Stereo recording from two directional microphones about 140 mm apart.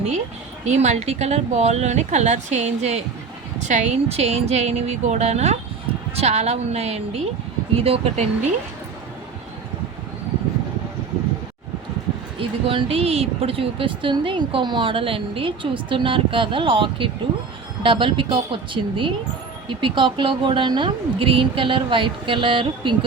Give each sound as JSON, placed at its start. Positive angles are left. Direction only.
{"t": 0.6, "sound": "speech", "side_deg": -55}
{"t": 12.4, "sound": "speech", "side_deg": -40}